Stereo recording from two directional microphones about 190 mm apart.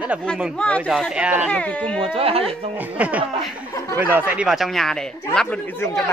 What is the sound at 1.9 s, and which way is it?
Speech, 30° right (ahead or behind).